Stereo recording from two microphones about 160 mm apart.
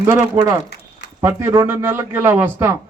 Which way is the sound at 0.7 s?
90° left.